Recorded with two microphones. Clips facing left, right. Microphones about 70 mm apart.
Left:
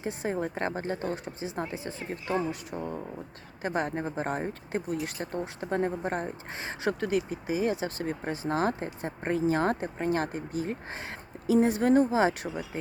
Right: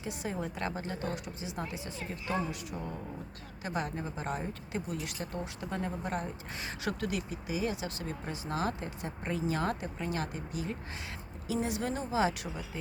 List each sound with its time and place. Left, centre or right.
0.0 s speech: left